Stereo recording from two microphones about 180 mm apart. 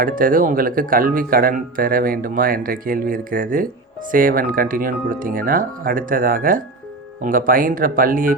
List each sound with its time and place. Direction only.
0.0 s speech: 50° right (ahead or behind)